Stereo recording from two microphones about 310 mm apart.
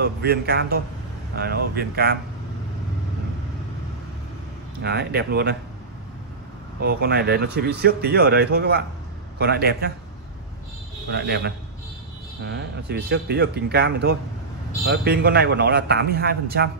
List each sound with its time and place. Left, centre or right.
0.0 s a man's voice: right
4.8 s a man's voice: right
6.8 s a man's voice: right
11.1 s a man's voice: right